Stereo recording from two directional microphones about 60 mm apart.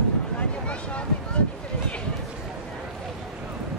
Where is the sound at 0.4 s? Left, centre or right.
Centre.